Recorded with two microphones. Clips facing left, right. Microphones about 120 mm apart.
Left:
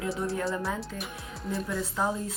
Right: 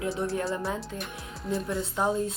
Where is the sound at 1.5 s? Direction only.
25° right (ahead or behind).